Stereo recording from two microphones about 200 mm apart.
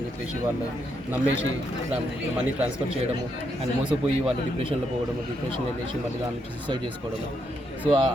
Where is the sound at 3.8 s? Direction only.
5° right (ahead or behind).